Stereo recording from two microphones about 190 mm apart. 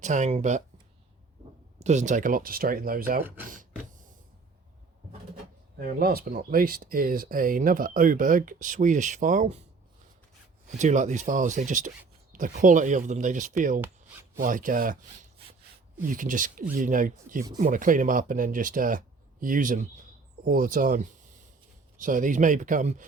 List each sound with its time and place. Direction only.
0.0 s speech: 40° right (ahead or behind)
1.8 s speech: 40° right (ahead or behind)
5.7 s speech: 50° right (ahead or behind)
10.8 s speech: 40° right (ahead or behind)